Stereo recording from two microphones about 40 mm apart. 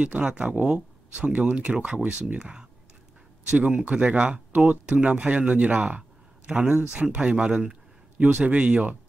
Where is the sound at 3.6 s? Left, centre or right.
Right.